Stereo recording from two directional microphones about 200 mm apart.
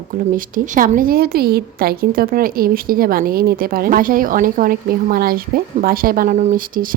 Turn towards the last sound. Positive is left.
turn(degrees=-45)  # may be behind; listen again after turning